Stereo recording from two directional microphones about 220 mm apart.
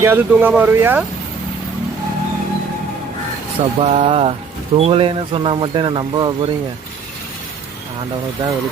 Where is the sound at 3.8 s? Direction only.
30° right (ahead or behind).